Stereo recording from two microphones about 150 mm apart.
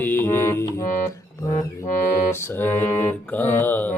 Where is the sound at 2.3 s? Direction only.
15° left (ahead or behind).